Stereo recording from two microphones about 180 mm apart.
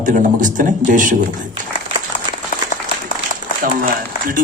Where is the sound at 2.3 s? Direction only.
25° right (ahead or behind).